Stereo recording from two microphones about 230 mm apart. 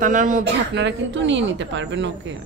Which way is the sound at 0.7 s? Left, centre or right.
Right.